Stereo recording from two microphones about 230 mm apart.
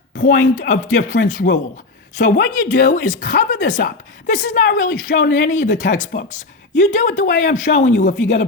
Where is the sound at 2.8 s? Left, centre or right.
Left.